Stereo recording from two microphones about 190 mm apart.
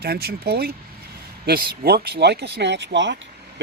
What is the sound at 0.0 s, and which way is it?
Speech, 55° right (ahead or behind).